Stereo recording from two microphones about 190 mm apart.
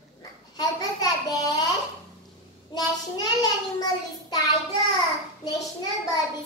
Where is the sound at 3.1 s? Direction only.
20° left (ahead or behind).